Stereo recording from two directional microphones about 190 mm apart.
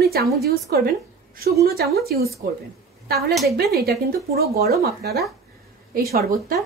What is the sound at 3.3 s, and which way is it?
Speech, centre (ahead or behind).